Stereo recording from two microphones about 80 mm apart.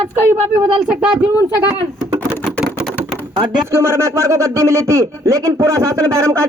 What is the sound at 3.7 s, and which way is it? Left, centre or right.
Speech, right.